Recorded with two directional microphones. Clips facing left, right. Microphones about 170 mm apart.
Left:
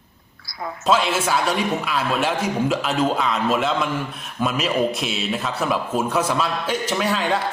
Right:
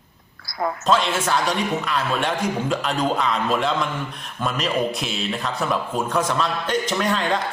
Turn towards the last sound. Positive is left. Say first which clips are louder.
# even
turn(degrees=5)  # may be behind; listen again after turning